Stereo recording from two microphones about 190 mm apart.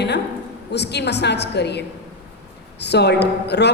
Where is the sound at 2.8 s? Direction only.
60° left (ahead or behind).